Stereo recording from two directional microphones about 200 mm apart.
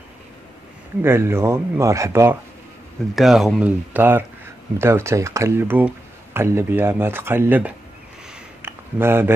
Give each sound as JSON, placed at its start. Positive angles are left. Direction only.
{"t": 1.0, "sound": "speech", "side_deg": -10}
{"t": 3.2, "sound": "speech", "side_deg": 0}
{"t": 8.6, "sound": "a sound", "side_deg": -10}